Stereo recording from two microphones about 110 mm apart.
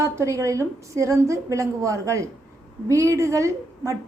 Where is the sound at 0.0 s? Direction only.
30° right (ahead or behind).